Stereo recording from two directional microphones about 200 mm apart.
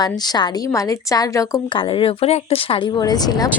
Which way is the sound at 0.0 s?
20° left (ahead or behind).